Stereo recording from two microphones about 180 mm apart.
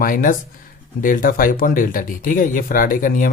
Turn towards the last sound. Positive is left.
turn(degrees=50)  # may be behind; listen again after turning